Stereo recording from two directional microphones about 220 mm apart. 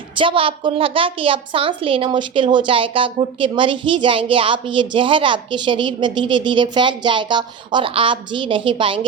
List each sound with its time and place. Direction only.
0.2 s a woman's voice: 25° right (ahead or behind)